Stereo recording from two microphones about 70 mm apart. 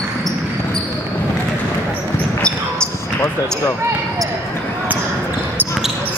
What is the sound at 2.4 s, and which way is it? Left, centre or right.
Basketball bounce, centre.